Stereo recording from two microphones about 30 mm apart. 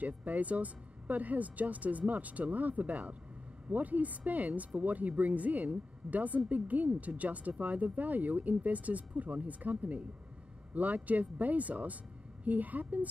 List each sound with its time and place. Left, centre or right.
0.0 s speech: right